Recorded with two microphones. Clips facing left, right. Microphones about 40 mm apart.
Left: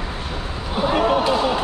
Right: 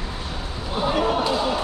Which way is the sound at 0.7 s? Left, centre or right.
Centre.